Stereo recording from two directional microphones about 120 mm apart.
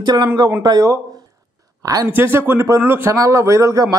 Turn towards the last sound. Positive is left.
turn(degrees=-30)  # may be behind; listen again after turning